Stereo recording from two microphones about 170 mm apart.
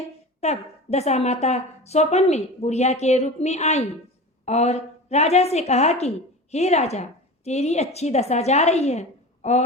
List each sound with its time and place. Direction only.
0.4 s a woman's voice: 40° left (ahead or behind)